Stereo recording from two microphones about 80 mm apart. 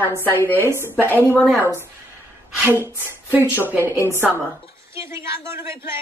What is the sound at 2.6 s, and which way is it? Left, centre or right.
A man's voice, right.